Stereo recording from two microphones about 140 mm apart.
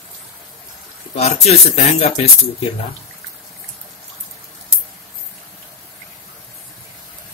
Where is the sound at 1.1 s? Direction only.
50° left (ahead or behind).